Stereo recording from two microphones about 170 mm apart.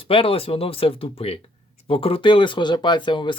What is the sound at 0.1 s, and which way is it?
Speech, 35° left (ahead or behind).